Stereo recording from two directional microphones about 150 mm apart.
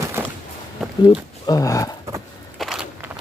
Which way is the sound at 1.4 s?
25° left (ahead or behind).